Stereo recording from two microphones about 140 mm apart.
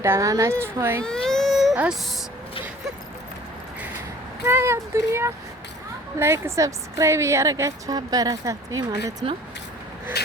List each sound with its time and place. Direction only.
0.0 s a woman's voice: 20° right (ahead or behind)
1.0 s baby cry: 5° left (ahead or behind)
4.4 s a woman's voice: 15° right (ahead or behind)